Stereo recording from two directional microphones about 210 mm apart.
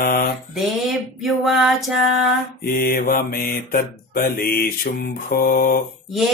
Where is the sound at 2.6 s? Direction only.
45° left (ahead or behind).